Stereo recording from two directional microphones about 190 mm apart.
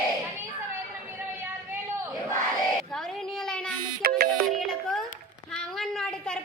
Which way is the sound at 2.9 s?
Centre (ahead or behind).